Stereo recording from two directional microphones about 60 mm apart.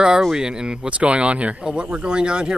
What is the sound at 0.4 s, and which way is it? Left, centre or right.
Speech, centre.